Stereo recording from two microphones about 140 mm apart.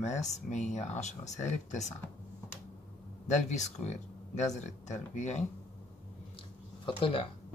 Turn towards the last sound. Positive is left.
turn(degrees=40)  # may be behind; listen again after turning